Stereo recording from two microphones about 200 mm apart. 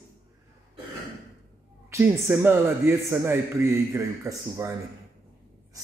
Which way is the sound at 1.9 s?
10° right (ahead or behind).